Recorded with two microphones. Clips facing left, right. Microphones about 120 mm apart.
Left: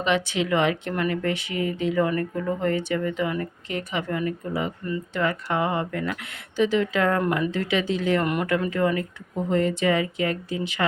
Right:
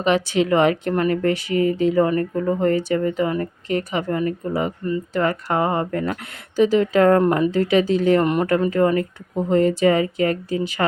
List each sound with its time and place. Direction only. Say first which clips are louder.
0.0 s speech: right 5 dB; 40° right (ahead or behind)